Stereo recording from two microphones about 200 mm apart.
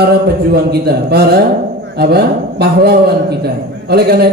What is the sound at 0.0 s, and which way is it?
A man's voice, 55° right (ahead or behind).